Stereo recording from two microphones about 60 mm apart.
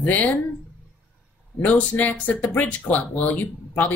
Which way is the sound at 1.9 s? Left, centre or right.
Left.